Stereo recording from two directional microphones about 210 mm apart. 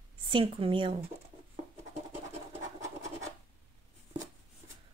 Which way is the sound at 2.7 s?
35° right (ahead or behind).